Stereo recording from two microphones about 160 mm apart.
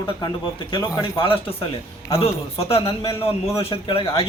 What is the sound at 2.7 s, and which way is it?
Speech, 35° left (ahead or behind).